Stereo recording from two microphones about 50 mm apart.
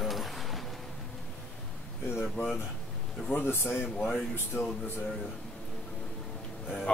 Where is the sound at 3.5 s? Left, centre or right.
Left.